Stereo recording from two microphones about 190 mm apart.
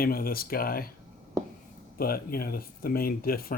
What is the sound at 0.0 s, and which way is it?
Speech, 50° left (ahead or behind).